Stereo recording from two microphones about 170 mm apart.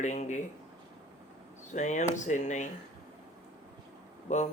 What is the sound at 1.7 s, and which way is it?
Speech, 45° left (ahead or behind).